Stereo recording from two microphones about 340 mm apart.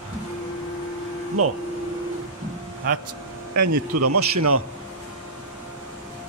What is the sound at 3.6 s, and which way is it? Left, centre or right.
Speech, right.